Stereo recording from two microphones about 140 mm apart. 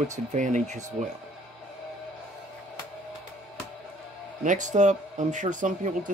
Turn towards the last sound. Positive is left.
turn(degrees=-65)  # may be behind; listen again after turning